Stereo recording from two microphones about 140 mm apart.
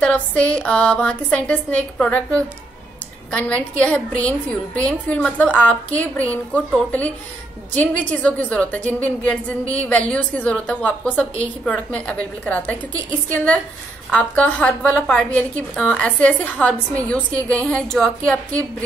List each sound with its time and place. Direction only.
0.0 s a woman's voice: 10° left (ahead or behind)
14.1 s a woman's voice: 10° left (ahead or behind)